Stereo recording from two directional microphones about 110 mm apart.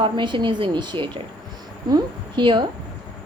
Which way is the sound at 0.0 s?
45° right (ahead or behind).